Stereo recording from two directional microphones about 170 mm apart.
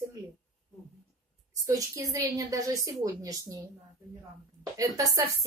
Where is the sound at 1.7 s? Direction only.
20° right (ahead or behind).